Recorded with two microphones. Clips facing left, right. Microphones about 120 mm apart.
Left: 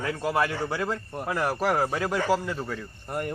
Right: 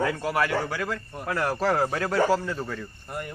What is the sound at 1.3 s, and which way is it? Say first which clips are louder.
Speech: right 1 dB; 10° left (ahead or behind).